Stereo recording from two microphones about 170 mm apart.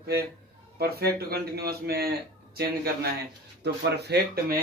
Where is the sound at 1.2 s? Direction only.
65° right (ahead or behind).